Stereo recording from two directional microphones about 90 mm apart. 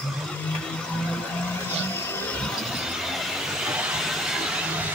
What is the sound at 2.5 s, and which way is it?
Vehicle, 5° right (ahead or behind).